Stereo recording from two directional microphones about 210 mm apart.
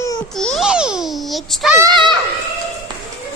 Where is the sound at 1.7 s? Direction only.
20° right (ahead or behind).